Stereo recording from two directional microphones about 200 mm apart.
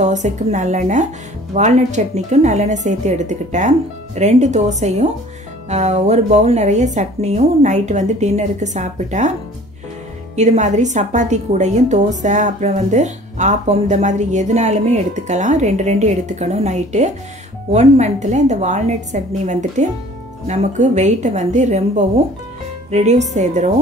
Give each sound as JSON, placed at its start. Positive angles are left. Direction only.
{"t": 0.0, "sound": "a woman's voice", "side_deg": -35}
{"t": 10.3, "sound": "a woman's voice", "side_deg": -35}